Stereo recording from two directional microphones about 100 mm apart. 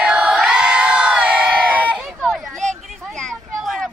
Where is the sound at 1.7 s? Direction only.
15° right (ahead or behind).